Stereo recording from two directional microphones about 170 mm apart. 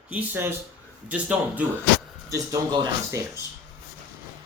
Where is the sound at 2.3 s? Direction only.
20° right (ahead or behind).